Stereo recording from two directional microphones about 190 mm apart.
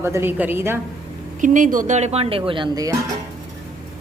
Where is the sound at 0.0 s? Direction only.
10° right (ahead or behind).